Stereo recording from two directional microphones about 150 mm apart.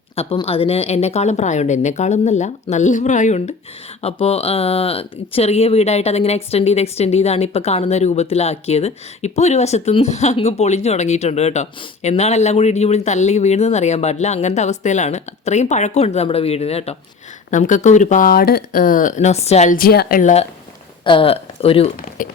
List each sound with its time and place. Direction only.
0.4 s speech: 40° left (ahead or behind)
19.7 s a woman's voice: 80° left
21.0 s speech: 35° left (ahead or behind)
22.2 s a woman's voice: 65° left (ahead or behind)